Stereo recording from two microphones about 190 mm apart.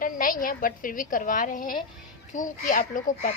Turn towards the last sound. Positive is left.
turn(degrees=45)  # may be behind; listen again after turning